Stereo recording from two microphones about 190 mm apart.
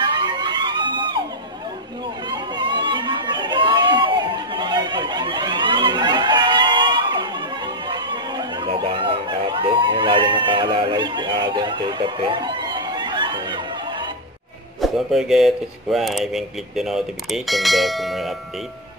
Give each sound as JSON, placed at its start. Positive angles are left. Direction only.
{"t": 0.1, "sound": "a sound", "side_deg": -25}
{"t": 2.3, "sound": "chatter", "side_deg": -25}
{"t": 14.8, "sound": "speech", "side_deg": 0}